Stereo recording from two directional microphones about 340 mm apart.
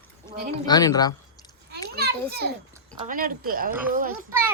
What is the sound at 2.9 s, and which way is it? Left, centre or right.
Speech, right.